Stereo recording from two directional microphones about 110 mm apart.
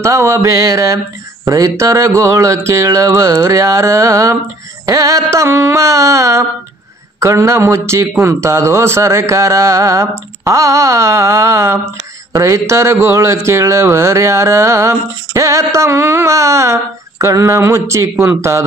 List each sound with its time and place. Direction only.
0.0 s speech: 25° right (ahead or behind)